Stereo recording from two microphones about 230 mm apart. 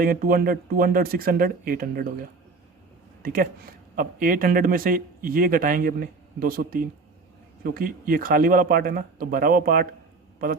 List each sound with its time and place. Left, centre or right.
0.0 s a man's voice: right
3.2 s a man's voice: right